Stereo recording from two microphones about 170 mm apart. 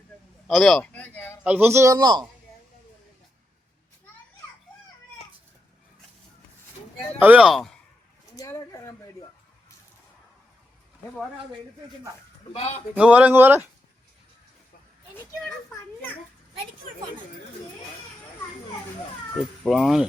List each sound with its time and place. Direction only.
0.4 s a man's voice: centre (ahead or behind)
1.5 s a man's voice: 10° right (ahead or behind)
7.2 s speech: 10° right (ahead or behind)
8.4 s a sound: 20° left (ahead or behind)
13.0 s a man's voice: 5° right (ahead or behind)
19.6 s speech: centre (ahead or behind)